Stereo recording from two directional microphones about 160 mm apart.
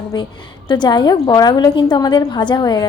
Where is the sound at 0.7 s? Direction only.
30° left (ahead or behind).